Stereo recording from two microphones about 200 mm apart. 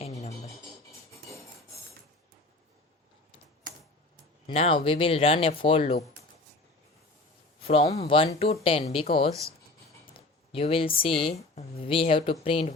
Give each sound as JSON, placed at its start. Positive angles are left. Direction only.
{"t": 0.2, "sound": "music", "side_deg": 30}
{"t": 4.4, "sound": "speech", "side_deg": 30}
{"t": 7.6, "sound": "speech", "side_deg": 30}
{"t": 10.2, "sound": "speech", "side_deg": 30}